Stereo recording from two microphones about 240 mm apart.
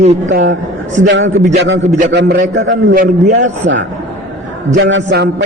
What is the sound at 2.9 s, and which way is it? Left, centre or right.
Speech, right.